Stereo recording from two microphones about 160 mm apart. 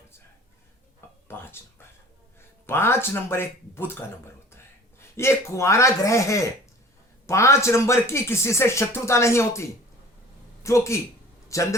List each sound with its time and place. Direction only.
1.0 s a sound: 15° left (ahead or behind)
2.6 s speech: 15° left (ahead or behind)
5.1 s speech: 15° left (ahead or behind)